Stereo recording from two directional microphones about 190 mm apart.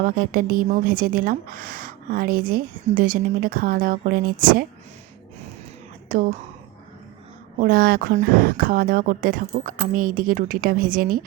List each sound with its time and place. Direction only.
0.0 s speech: 50° right (ahead or behind)
6.1 s speech: 45° right (ahead or behind)
7.6 s speech: 55° right (ahead or behind)